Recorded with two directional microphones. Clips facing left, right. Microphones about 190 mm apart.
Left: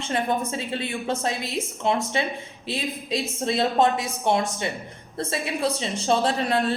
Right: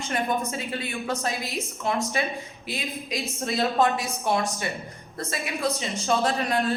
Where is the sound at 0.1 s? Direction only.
30° left (ahead or behind).